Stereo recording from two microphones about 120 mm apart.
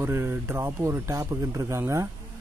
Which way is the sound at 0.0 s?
20° right (ahead or behind).